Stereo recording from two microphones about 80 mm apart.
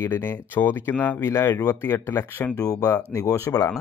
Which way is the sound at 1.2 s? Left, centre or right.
Left.